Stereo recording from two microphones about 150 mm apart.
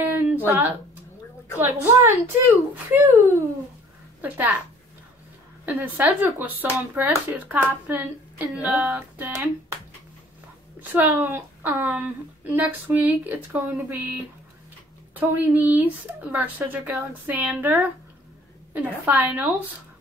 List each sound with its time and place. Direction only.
0.0 s a sound: 15° right (ahead or behind)
1.6 s speech: 15° right (ahead or behind)
5.7 s speech: 5° right (ahead or behind)
10.8 s speech: 10° right (ahead or behind)
15.1 s speech: 10° right (ahead or behind)